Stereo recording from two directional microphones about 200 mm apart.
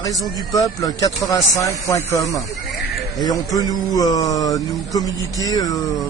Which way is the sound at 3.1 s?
20° left (ahead or behind).